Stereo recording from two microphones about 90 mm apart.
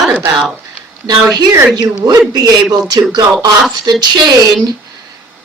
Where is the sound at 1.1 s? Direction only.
50° right (ahead or behind).